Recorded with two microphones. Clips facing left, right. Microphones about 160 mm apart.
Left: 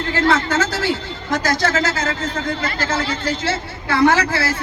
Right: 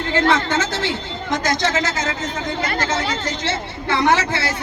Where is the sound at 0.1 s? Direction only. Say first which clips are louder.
Even; 20° right (ahead or behind).